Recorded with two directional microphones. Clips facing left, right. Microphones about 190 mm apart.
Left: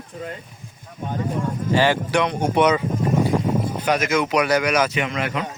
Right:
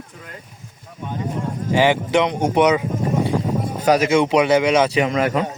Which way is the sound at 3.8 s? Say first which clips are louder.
Right 8 dB; 35° right (ahead or behind).